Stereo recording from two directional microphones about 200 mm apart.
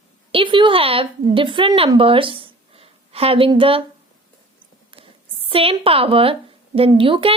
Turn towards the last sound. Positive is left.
turn(degrees=-25)  # may be behind; listen again after turning